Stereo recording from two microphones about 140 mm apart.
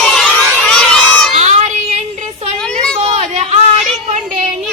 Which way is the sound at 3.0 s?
50° right (ahead or behind).